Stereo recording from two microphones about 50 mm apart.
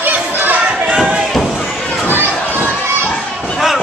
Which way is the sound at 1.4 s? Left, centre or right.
Centre.